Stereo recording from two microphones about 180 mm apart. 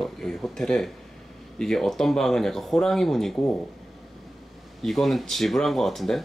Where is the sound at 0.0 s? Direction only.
5° left (ahead or behind).